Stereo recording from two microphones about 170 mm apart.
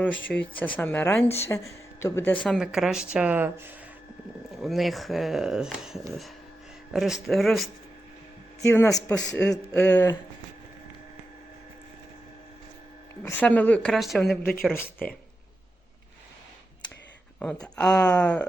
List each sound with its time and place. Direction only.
0.3 s speech: 10° left (ahead or behind); by 3.7 s 10° right (ahead or behind)
4.6 s speech: centre (ahead or behind)
8.6 s speech: 15° left (ahead or behind)
9.7 s speech: 10° left (ahead or behind)
13.2 s speech: 10° left (ahead or behind)
17.4 s speech: 5° left (ahead or behind)